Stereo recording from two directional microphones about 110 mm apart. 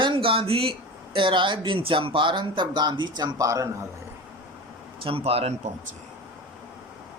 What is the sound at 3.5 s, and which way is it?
Speech, 30° right (ahead or behind).